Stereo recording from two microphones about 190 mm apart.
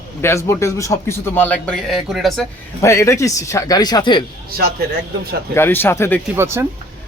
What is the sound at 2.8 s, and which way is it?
Speech, 15° left (ahead or behind).